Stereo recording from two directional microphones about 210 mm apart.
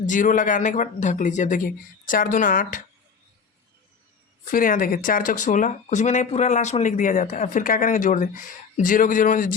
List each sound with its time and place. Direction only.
0.0 s speech: 35° left (ahead or behind)
4.5 s speech: 40° left (ahead or behind)